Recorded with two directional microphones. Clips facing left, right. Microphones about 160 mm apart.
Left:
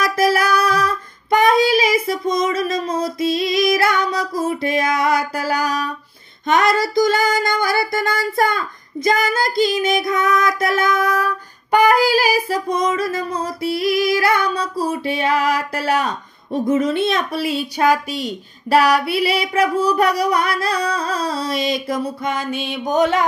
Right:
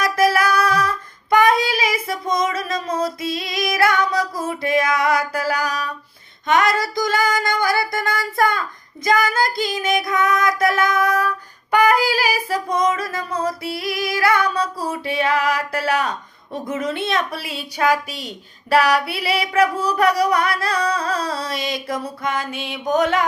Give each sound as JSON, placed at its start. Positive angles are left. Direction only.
{"t": 0.0, "sound": "music", "side_deg": 30}
{"t": 1.3, "sound": "child singing", "side_deg": 30}
{"t": 2.3, "sound": "female singing", "side_deg": 30}
{"t": 11.7, "sound": "child singing", "side_deg": 30}
{"t": 14.9, "sound": "singing", "side_deg": 30}